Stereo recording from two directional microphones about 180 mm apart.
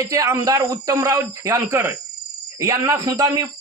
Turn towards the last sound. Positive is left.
turn(degrees=-20)  # may be behind; listen again after turning